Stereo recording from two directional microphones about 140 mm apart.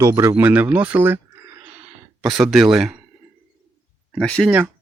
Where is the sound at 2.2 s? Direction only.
5° right (ahead or behind).